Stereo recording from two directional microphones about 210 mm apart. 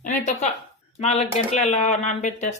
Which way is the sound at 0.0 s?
35° left (ahead or behind).